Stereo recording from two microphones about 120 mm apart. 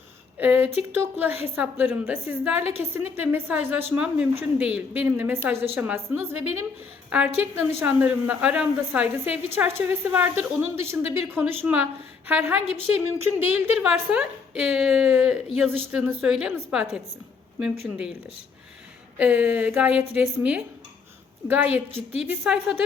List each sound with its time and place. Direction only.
0.3 s a woman's voice: 15° right (ahead or behind)
19.1 s a woman's voice: 10° right (ahead or behind)